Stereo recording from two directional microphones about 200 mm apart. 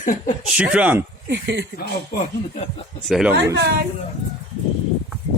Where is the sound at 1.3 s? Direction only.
60° right (ahead or behind).